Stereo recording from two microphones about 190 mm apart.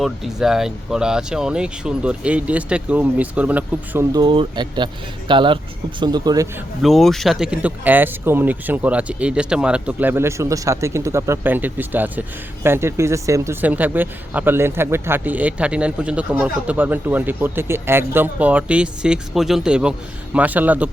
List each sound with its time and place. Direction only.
0.0 s speech: centre (ahead or behind)
4.1 s speech: 25° right (ahead or behind)
6.8 s speech: centre (ahead or behind)